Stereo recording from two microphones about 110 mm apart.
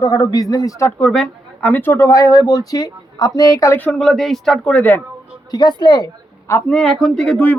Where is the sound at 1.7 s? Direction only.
20° left (ahead or behind).